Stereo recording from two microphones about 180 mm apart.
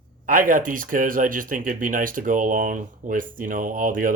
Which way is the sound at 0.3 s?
50° right (ahead or behind).